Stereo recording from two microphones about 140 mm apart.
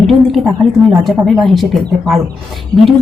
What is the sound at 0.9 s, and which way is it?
Speech, centre (ahead or behind).